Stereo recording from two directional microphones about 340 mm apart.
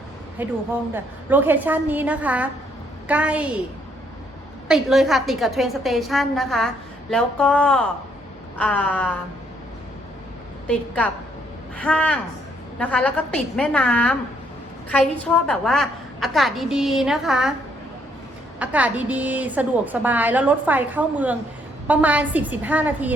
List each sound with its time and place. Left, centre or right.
0.4 s a woman's voice: centre
4.7 s a woman's voice: centre
10.7 s a woman's voice: centre
18.6 s a woman's voice: centre